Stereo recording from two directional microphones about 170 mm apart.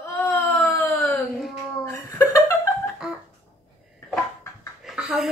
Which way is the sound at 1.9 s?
20° left (ahead or behind).